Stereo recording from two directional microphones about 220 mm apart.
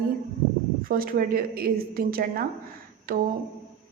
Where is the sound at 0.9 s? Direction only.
40° right (ahead or behind).